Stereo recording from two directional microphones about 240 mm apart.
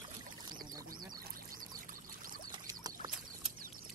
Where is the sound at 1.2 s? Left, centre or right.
Right.